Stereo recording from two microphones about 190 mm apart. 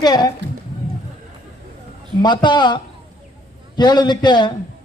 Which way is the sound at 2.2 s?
25° left (ahead or behind).